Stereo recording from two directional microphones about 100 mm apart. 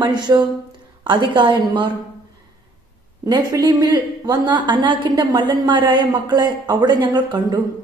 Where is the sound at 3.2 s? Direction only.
40° right (ahead or behind).